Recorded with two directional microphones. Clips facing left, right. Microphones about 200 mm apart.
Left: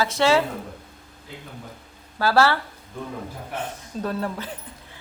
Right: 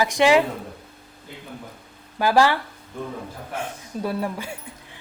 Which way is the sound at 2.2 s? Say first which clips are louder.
Right 1 dB; 15° right (ahead or behind).